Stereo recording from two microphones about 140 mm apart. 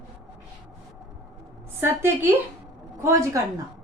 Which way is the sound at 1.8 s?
15° right (ahead or behind).